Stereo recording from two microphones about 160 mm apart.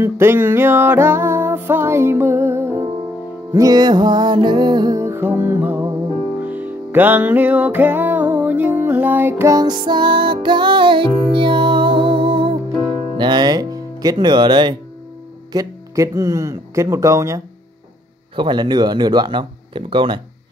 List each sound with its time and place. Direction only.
0.0 s music: 15° right (ahead or behind)
18.3 s music: 30° right (ahead or behind)